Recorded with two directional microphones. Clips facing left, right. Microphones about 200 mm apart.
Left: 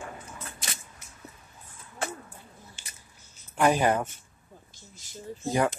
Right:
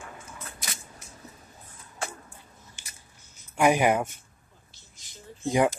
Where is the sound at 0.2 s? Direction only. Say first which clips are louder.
Left 1 dB; 25° left (ahead or behind).